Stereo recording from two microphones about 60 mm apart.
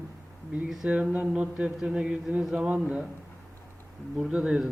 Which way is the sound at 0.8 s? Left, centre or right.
Right.